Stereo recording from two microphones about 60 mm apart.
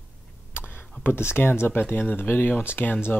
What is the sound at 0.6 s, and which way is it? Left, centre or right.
Speech, left.